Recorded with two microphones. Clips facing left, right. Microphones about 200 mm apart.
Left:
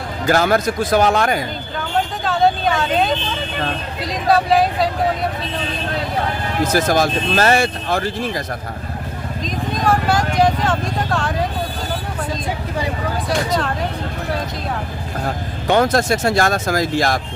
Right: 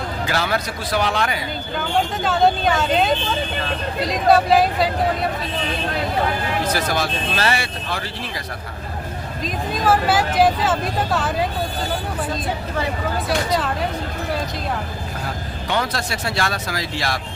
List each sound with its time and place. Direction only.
0.3 s speech: 45° left (ahead or behind)
2.2 s speech: centre (ahead or behind)
6.7 s speech: 45° left (ahead or behind)
9.4 s speech: 5° right (ahead or behind)
15.6 s speech: 50° left (ahead or behind)